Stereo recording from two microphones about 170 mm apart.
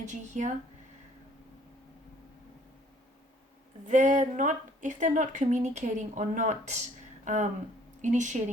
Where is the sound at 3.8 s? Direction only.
45° right (ahead or behind).